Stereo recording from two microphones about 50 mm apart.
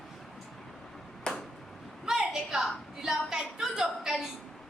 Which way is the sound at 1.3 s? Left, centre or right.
Centre.